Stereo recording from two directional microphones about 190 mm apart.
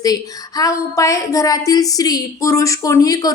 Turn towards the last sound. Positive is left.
turn(degrees=20)  # may be behind; listen again after turning